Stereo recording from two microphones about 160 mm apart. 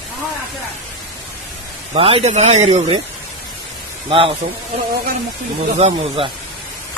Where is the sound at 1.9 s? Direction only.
35° right (ahead or behind).